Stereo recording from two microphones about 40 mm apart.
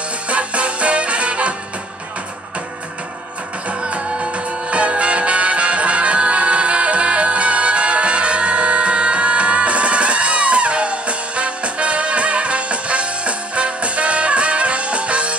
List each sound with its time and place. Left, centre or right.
0.3 s music: right
3.8 s music: right